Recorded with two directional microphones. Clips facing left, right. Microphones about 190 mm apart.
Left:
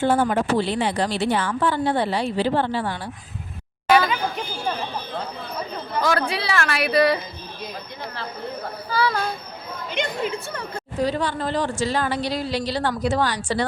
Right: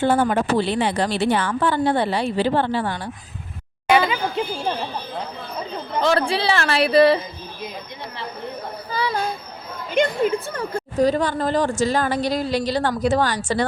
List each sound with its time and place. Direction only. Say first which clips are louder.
0.0 s a woman's voice: right 1 dB; 65° right (ahead or behind)
3.8 s a sound: even; 25° right (ahead or behind)
5.9 s speech: right 3 dB; 25° right (ahead or behind)
8.9 s a child's voice: left 2 dB; 20° right (ahead or behind)
11.0 s speech: right 4 dB; 45° right (ahead or behind)